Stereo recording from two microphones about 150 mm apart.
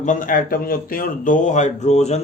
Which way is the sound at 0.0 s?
60° left (ahead or behind).